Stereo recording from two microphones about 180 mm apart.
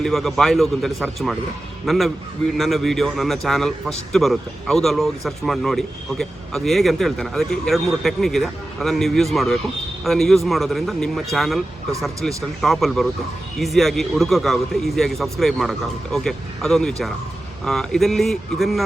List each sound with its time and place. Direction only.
0.0 s speech: centre (ahead or behind)